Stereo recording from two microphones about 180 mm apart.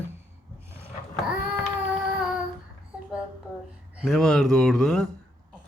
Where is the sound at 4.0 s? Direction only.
Centre (ahead or behind).